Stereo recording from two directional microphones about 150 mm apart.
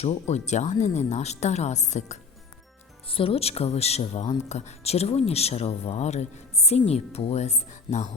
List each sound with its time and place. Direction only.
0.0 s speech: 45° left (ahead or behind)
3.1 s speech: 35° left (ahead or behind); by 8.1 s 50° left (ahead or behind)